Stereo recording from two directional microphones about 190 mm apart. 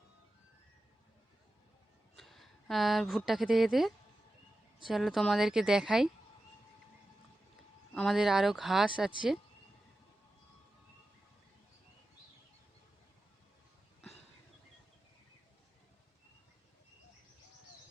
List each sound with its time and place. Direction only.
2.1 s speech: centre (ahead or behind)
7.9 s speech: centre (ahead or behind)